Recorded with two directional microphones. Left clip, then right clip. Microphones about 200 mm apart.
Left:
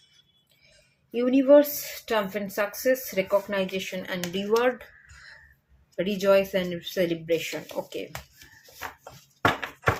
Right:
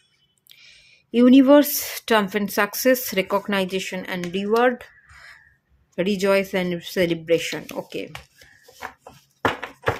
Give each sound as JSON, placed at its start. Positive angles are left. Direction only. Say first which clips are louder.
{"t": 1.1, "sound": "speech", "louder": "right 4 dB", "side_deg": -55}
{"t": 6.0, "sound": "speech", "louder": "right 2 dB", "side_deg": -40}
{"t": 7.5, "sound": "speech", "louder": "right 3 dB", "side_deg": -25}